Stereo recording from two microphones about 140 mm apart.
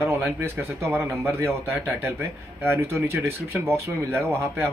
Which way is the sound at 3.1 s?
15° right (ahead or behind).